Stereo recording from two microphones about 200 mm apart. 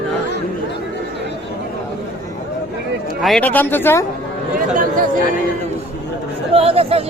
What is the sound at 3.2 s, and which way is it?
Speech, centre (ahead or behind).